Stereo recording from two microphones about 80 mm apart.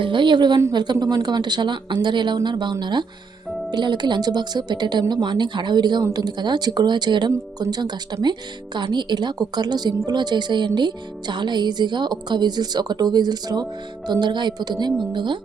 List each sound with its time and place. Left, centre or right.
0.0 s a woman's voice: right